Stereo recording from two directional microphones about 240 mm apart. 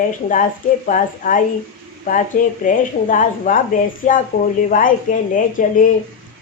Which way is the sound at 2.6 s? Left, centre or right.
Left.